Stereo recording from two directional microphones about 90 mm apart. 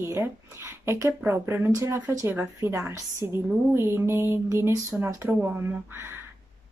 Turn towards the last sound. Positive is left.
turn(degrees=-20)  # may be behind; listen again after turning